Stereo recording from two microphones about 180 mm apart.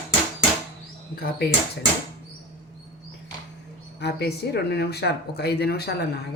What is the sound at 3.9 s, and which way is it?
Speech, 70° left (ahead or behind).